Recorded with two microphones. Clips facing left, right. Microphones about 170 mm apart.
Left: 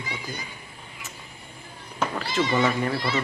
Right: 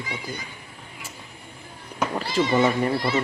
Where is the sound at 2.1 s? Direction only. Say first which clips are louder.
Right 3 dB; 30° right (ahead or behind).